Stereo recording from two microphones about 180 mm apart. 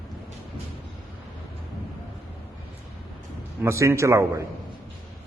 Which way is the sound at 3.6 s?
15° right (ahead or behind).